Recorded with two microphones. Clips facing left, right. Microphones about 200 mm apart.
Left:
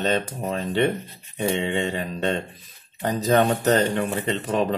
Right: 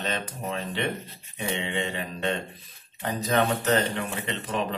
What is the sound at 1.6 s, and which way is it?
Speech, 40° left (ahead or behind).